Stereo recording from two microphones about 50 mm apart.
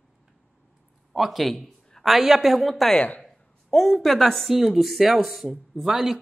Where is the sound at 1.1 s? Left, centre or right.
Centre.